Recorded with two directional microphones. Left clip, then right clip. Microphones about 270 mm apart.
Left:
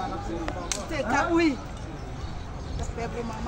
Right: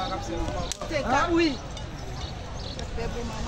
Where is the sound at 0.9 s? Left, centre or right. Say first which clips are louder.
Right 1 dB; left.